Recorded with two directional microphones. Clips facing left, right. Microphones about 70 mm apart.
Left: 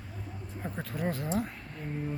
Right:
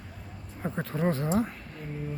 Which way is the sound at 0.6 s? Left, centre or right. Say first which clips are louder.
Right 6 dB; centre.